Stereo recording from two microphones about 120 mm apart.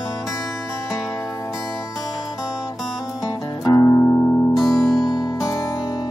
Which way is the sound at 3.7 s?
20° left (ahead or behind).